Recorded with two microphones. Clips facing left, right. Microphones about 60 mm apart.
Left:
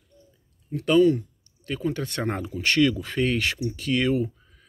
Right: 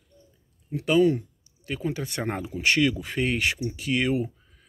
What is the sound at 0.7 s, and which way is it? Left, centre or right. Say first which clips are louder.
Speech: left 2 dB; centre.